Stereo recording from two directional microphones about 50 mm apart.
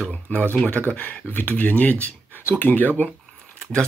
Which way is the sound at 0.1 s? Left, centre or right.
Left.